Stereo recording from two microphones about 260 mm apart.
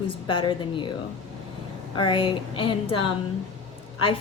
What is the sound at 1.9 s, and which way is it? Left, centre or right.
Speech, centre.